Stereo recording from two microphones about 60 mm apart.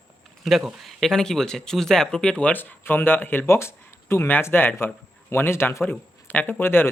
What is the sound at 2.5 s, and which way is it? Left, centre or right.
Speech, left.